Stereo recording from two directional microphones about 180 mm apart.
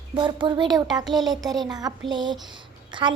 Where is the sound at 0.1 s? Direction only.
25° right (ahead or behind).